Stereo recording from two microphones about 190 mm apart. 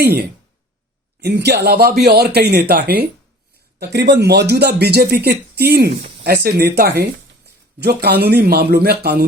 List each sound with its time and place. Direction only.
0.0 s speech: 55° right (ahead or behind)